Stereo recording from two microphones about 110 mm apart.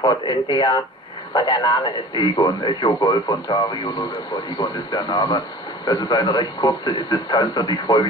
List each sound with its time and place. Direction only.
0.0 s a man's voice: 40° left (ahead or behind)